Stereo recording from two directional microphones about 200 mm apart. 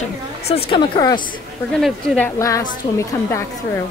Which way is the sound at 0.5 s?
25° left (ahead or behind).